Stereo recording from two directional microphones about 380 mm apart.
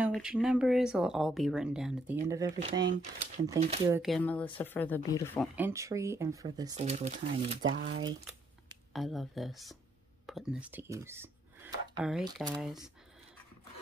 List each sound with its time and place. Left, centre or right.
0.0 s speech: centre
3.9 s speech: centre
8.9 s speech: centre